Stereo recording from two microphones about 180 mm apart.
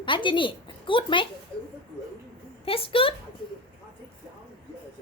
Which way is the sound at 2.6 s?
30° left (ahead or behind).